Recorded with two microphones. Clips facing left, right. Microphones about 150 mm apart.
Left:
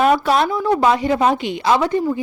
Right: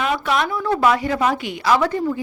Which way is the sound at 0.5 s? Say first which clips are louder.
Left 2 dB; 20° left (ahead or behind).